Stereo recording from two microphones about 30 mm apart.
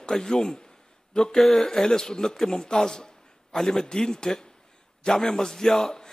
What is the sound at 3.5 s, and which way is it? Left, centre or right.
A man's voice, centre.